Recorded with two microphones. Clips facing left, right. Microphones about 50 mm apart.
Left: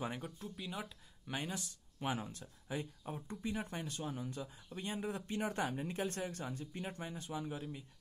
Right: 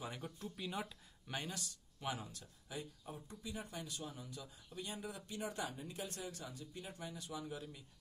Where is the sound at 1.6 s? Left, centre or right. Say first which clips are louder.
Left 3 dB; left.